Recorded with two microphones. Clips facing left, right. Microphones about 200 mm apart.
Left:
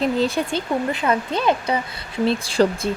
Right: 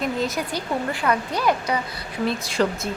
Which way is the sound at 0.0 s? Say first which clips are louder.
Left 5 dB; 30° left (ahead or behind).